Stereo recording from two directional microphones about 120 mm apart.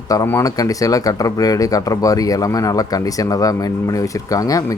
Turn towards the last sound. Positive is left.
turn(degrees=30)  # may be behind; listen again after turning